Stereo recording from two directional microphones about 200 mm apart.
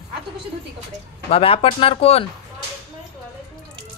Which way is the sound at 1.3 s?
30° left (ahead or behind).